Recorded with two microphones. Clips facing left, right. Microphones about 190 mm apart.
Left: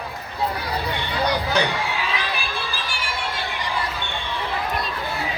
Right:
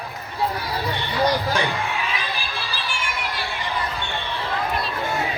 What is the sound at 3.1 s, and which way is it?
Chatter, 30° left (ahead or behind).